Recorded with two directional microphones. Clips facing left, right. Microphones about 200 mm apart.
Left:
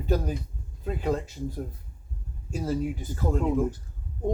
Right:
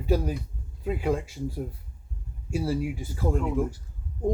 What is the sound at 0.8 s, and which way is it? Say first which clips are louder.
Speech: right 1 dB; 10° right (ahead or behind).